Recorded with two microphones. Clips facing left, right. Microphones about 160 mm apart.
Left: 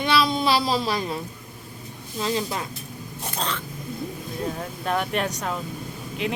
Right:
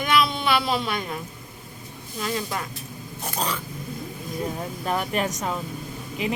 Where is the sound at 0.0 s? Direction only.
30° left (ahead or behind).